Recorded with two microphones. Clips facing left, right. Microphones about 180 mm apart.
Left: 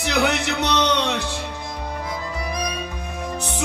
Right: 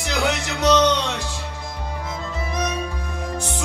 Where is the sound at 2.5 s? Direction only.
25° right (ahead or behind).